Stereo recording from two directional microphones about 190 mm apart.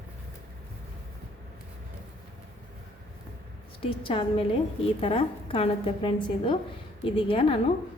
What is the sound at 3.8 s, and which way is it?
A woman's voice, 30° left (ahead or behind).